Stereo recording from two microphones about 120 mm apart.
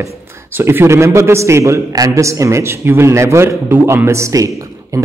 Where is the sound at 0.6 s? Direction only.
20° right (ahead or behind).